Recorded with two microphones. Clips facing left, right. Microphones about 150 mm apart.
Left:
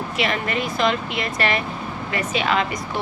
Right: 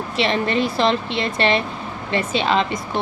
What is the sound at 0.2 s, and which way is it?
Speech, 30° right (ahead or behind).